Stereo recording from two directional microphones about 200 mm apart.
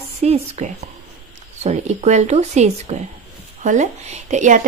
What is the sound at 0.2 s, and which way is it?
Speech, 30° right (ahead or behind).